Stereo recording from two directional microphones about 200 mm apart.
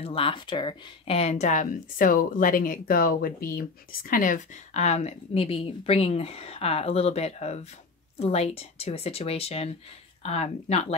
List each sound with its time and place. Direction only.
0.0 s speech: 25° left (ahead or behind)